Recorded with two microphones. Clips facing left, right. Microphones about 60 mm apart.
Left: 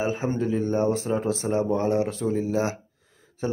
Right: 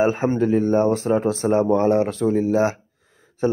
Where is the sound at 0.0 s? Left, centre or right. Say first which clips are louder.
Right 7 dB; right.